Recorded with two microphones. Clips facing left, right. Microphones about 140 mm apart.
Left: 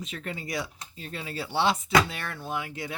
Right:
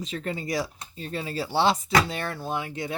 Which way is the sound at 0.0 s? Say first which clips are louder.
Right 5 dB; 30° right (ahead or behind).